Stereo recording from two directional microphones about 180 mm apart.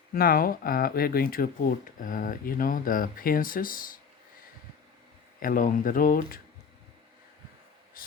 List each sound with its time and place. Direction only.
0.1 s speech: 55° left (ahead or behind)
5.4 s speech: 50° left (ahead or behind)
8.0 s a sound: 55° left (ahead or behind)